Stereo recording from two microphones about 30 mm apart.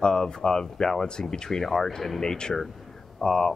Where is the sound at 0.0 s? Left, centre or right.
Left.